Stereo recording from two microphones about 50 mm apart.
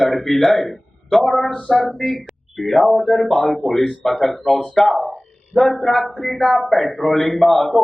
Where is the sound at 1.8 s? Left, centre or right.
Centre.